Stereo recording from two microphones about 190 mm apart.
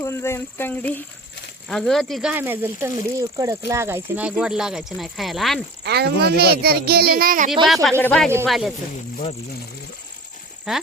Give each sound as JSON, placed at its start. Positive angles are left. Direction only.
{"t": 0.0, "sound": "speech", "side_deg": 15}
{"t": 2.3, "sound": "speech", "side_deg": -10}
{"t": 5.8, "sound": "a child's voice", "side_deg": -60}
{"t": 7.9, "sound": "speech", "side_deg": 10}
{"t": 10.7, "sound": "speech", "side_deg": 0}